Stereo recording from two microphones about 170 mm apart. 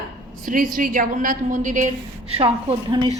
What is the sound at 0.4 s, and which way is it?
A woman's voice, 55° right (ahead or behind).